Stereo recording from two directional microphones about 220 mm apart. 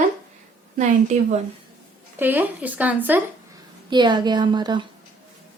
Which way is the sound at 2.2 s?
10° right (ahead or behind).